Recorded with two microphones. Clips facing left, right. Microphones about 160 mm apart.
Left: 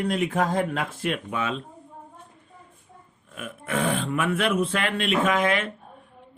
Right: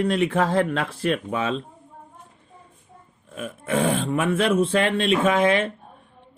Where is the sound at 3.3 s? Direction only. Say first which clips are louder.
Right 4 dB; 35° right (ahead or behind).